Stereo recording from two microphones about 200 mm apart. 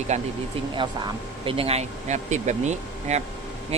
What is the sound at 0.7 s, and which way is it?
A man's voice, 25° right (ahead or behind).